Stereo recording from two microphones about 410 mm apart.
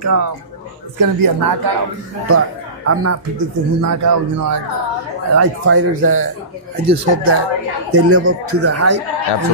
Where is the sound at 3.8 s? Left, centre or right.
Right.